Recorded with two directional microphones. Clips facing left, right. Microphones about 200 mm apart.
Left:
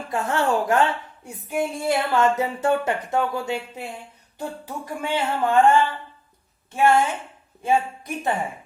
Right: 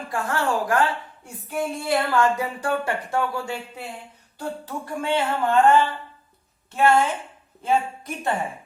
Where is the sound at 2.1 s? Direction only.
20° left (ahead or behind).